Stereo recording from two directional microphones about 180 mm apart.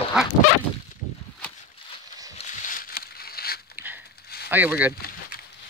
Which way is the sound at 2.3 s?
45° left (ahead or behind).